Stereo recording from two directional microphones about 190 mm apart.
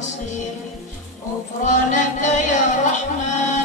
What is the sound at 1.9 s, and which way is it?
Music, 40° left (ahead or behind).